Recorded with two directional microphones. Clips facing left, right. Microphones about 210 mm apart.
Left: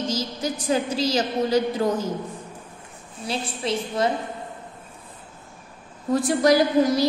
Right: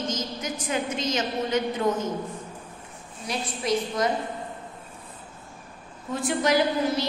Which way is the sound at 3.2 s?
30° left (ahead or behind).